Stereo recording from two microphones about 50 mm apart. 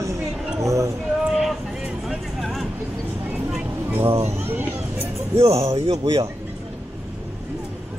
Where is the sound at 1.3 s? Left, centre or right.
Centre.